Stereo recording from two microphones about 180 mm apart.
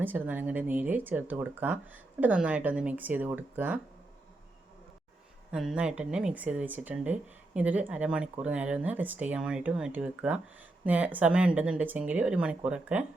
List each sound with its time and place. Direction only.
0.0 s speech: 10° right (ahead or behind)
5.5 s speech: 5° right (ahead or behind)